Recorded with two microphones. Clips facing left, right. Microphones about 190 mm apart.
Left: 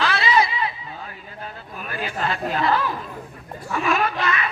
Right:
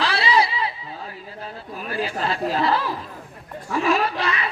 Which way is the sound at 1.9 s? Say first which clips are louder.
Right 1 dB; 30° right (ahead or behind).